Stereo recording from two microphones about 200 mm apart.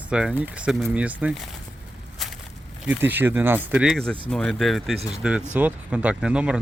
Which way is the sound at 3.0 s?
10° right (ahead or behind).